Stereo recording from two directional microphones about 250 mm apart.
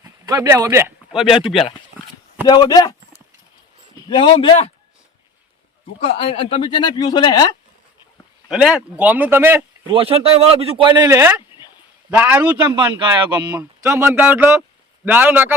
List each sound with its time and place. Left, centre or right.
0.0 s speech: centre
2.5 s speech: centre
4.1 s speech: centre
6.0 s speech: left
8.4 s speech: centre
9.8 s speech: right